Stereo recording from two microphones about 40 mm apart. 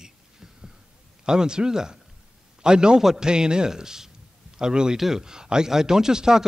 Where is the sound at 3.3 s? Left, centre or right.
Right.